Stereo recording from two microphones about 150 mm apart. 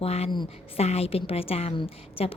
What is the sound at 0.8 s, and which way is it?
A woman's voice, 45° left (ahead or behind).